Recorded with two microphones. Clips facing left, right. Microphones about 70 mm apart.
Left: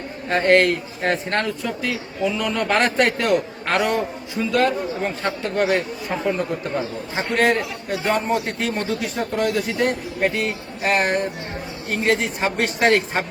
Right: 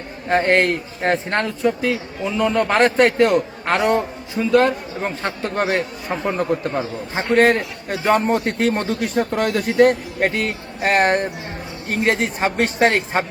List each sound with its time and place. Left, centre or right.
0.3 s a man's voice: right
7.2 s a man's voice: right